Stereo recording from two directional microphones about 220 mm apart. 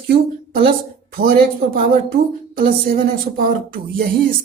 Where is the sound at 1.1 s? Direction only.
45° right (ahead or behind).